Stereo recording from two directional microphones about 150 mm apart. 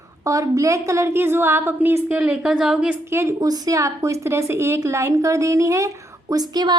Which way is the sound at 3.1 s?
20° right (ahead or behind).